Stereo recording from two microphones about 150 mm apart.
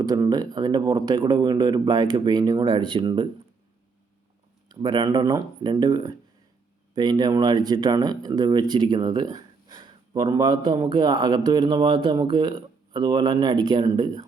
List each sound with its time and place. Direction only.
0.0 s speech: 25° right (ahead or behind)
4.7 s speech: 30° right (ahead or behind)